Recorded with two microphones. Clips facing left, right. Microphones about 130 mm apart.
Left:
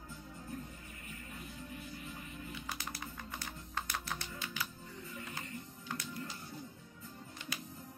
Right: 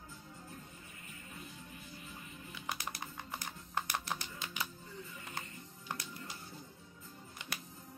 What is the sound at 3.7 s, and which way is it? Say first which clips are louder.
Music: right 3 dB; 20° right (ahead or behind).